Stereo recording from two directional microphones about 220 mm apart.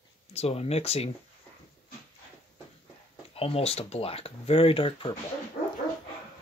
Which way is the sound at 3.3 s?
25° left (ahead or behind).